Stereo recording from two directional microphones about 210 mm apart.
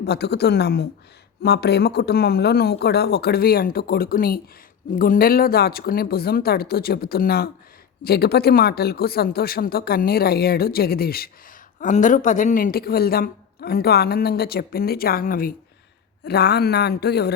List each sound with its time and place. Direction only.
0.0 s a woman's voice: 50° left (ahead or behind)